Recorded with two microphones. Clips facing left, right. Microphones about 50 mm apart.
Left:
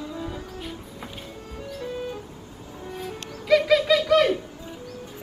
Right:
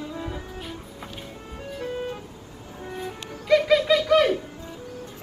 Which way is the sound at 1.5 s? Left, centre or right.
Right.